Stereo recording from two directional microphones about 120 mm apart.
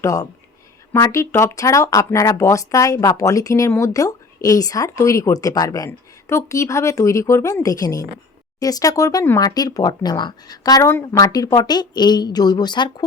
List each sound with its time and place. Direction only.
0.0 s a woman's voice: 25° left (ahead or behind)